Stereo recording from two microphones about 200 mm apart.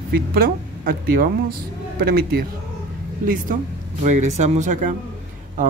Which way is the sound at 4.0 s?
35° right (ahead or behind).